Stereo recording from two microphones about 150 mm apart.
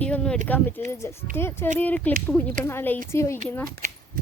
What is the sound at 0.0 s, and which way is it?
Keys jangling, 5° left (ahead or behind).